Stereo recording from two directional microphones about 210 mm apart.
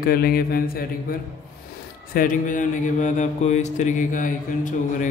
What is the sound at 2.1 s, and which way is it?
Mantra, 40° left (ahead or behind).